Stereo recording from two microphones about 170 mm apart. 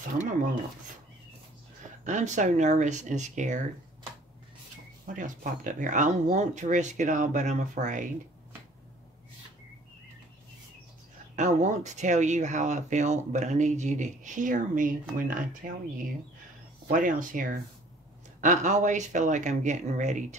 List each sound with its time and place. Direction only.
2.0 s speech: 45° right (ahead or behind)
5.0 s speech: 50° right (ahead or behind)
11.3 s speech: 45° right (ahead or behind)
16.8 s speech: 50° right (ahead or behind)